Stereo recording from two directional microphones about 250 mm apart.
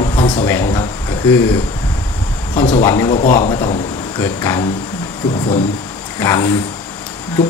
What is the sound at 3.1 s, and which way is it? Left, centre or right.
Speech, left.